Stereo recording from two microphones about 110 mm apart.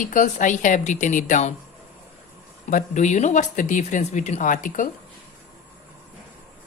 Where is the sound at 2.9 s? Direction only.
90° left.